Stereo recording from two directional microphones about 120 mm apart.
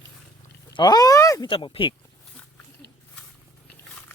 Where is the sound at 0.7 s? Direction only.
35° left (ahead or behind).